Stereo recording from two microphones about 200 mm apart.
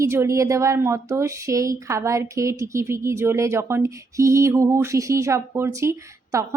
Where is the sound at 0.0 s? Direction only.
15° right (ahead or behind).